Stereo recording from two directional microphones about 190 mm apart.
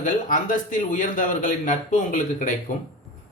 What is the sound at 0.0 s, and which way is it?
A man's voice, 45° left (ahead or behind).